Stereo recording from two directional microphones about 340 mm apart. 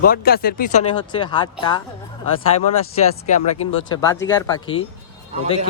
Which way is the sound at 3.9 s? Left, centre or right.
Centre.